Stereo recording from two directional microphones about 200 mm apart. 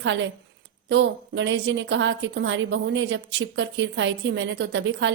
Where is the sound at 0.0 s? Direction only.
65° right (ahead or behind).